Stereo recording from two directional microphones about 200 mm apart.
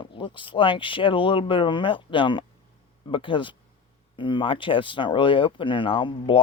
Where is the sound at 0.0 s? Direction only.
25° left (ahead or behind).